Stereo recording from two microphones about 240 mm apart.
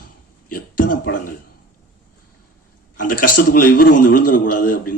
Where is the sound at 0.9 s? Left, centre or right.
Left.